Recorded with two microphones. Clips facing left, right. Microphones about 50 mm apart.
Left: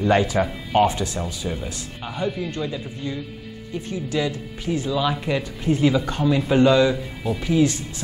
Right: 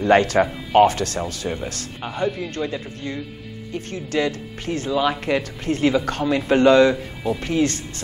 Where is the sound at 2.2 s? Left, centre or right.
Centre.